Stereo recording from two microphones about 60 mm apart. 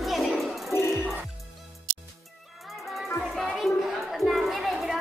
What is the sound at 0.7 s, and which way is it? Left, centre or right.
Music, left.